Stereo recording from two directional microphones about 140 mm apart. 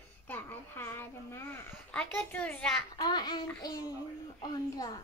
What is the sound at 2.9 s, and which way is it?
A child's voice, 30° left (ahead or behind).